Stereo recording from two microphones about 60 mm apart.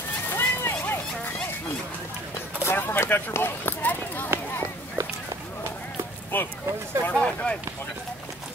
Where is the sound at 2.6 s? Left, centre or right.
Left.